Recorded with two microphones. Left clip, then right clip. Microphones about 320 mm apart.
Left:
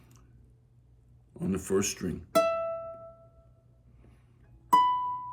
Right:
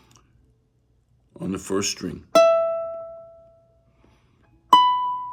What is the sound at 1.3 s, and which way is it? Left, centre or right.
Speech, centre.